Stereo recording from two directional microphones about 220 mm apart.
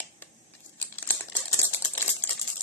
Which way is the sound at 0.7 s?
10° left (ahead or behind).